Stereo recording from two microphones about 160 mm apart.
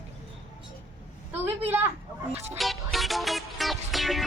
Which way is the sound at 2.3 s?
40° right (ahead or behind).